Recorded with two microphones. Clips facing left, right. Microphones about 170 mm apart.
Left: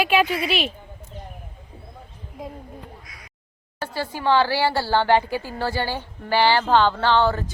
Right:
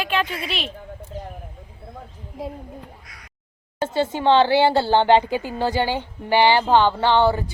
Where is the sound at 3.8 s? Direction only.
20° right (ahead or behind).